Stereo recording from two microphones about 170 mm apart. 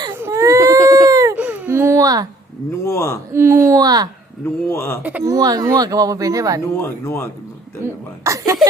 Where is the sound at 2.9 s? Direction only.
15° left (ahead or behind).